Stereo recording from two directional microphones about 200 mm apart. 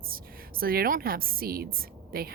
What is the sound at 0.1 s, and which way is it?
A woman's voice, 45° right (ahead or behind).